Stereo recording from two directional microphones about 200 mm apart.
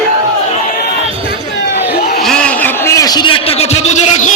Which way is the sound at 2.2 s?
5° left (ahead or behind).